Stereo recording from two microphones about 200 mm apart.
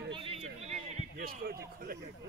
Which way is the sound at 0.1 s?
30° right (ahead or behind).